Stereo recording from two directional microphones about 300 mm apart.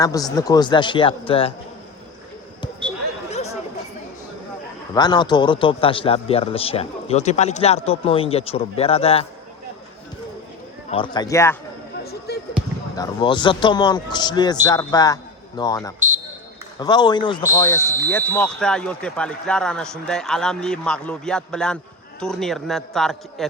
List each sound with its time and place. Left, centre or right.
0.0 s a man's voice: centre
3.3 s chatter: left
4.9 s a man's voice: centre
10.8 s a man's voice: centre
12.3 s basketball bounce: left
13.0 s a man's voice: centre